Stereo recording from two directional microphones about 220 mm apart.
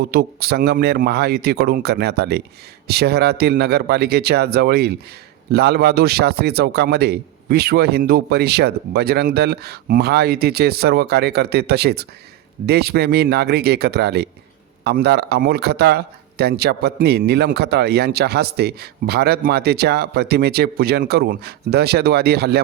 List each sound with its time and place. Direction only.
0.1 s speech: 45° right (ahead or behind)